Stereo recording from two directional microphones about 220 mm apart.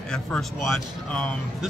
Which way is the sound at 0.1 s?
Centre (ahead or behind).